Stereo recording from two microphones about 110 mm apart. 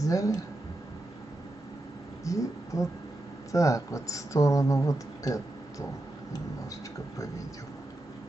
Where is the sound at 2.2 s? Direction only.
30° left (ahead or behind).